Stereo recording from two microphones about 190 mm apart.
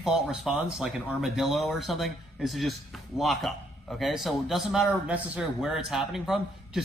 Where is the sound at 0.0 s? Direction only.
Centre (ahead or behind).